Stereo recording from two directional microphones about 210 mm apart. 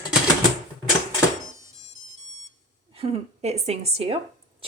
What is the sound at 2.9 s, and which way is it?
A woman's voice, 30° right (ahead or behind).